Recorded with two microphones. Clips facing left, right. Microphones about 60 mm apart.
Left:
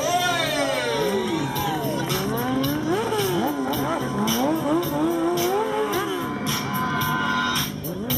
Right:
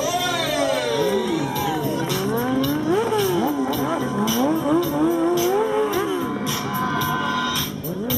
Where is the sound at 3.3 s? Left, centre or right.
Centre.